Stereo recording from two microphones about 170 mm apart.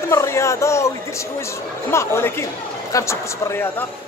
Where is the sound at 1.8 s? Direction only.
15° left (ahead or behind).